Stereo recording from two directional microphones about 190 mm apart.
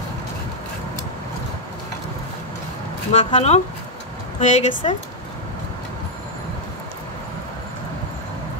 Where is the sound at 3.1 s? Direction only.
35° left (ahead or behind).